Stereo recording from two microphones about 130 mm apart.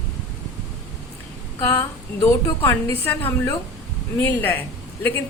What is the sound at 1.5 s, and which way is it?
A woman's voice, 20° left (ahead or behind).